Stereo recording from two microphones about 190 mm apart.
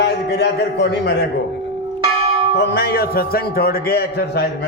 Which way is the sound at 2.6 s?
60° left (ahead or behind).